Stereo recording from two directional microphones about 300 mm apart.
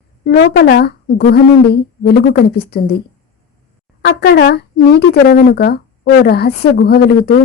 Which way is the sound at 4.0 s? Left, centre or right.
Left.